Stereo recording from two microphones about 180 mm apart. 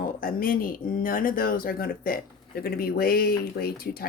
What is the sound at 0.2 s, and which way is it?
Speech, 55° left (ahead or behind).